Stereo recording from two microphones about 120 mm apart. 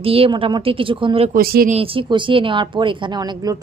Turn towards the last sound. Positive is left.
turn(degrees=-35)  # may be behind; listen again after turning